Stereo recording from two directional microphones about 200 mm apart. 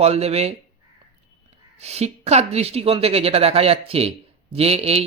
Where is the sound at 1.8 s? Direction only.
30° right (ahead or behind).